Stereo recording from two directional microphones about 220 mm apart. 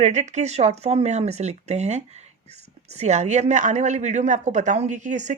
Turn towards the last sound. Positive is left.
turn(degrees=-35)  # may be behind; listen again after turning